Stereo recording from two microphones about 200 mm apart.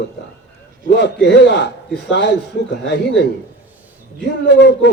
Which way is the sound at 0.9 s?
60° left (ahead or behind).